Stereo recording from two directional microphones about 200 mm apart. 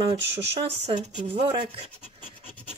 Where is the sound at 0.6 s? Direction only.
35° right (ahead or behind).